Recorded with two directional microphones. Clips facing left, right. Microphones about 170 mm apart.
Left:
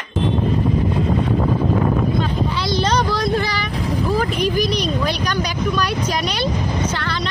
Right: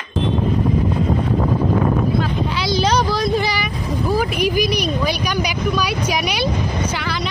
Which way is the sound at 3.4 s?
10° right (ahead or behind).